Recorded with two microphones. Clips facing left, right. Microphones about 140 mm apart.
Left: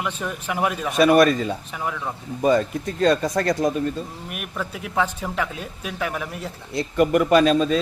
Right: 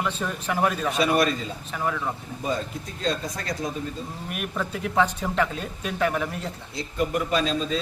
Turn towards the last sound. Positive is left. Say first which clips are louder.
# left 8 dB
turn(degrees=65)  # may be behind; listen again after turning